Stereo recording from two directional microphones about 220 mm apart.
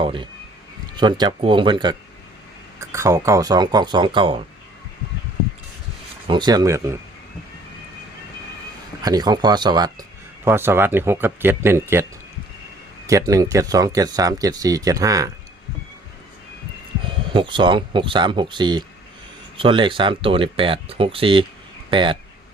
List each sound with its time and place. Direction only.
0.0 s speech: 25° right (ahead or behind)
6.2 s speech: 20° right (ahead or behind)
9.0 s speech: 20° right (ahead or behind)
13.1 s speech: 15° right (ahead or behind)
17.3 s speech: 20° right (ahead or behind)